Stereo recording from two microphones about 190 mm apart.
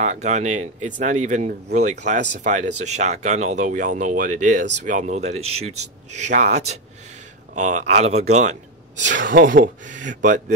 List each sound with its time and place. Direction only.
0.0 s speech: 35° right (ahead or behind)